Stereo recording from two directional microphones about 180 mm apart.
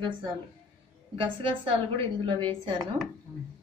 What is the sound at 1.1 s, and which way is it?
Speech, 30° right (ahead or behind).